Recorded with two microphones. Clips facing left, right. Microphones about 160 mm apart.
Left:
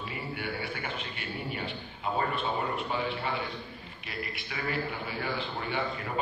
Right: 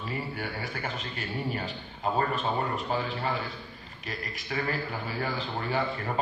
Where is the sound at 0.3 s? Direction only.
40° right (ahead or behind).